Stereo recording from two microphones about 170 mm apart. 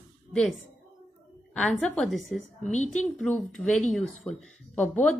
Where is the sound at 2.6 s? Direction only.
45° left (ahead or behind).